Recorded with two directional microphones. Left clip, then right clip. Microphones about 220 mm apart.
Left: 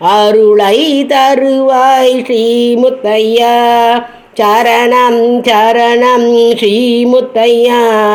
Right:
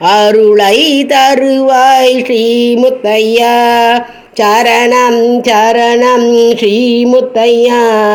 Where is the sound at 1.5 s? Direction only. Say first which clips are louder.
Even; 35° right (ahead or behind).